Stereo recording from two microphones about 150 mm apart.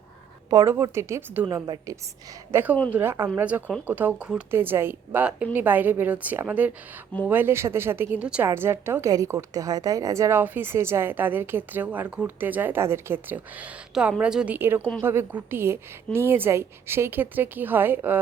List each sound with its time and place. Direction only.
0.5 s a woman's voice: 20° right (ahead or behind)